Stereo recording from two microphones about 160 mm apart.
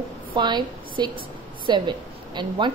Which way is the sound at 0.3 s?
30° right (ahead or behind).